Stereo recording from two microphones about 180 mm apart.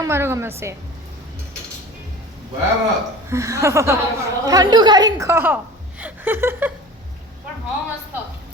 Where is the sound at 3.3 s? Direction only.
15° right (ahead or behind).